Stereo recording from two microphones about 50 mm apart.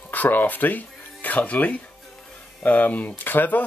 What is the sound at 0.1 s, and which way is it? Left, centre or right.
Speech, left.